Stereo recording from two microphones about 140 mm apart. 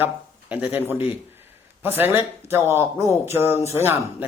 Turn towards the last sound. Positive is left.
turn(degrees=-15)  # may be behind; listen again after turning